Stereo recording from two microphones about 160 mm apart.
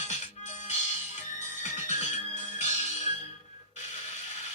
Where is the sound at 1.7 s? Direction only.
50° left (ahead or behind).